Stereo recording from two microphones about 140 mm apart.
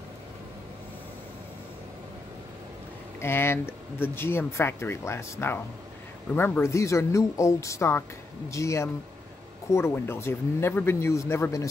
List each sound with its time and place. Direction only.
3.2 s speech: 15° left (ahead or behind)